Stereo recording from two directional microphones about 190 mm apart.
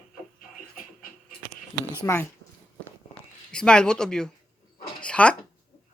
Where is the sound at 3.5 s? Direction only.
5° left (ahead or behind).